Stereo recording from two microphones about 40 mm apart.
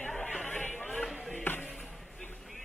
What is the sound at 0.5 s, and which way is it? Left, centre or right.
Music, left.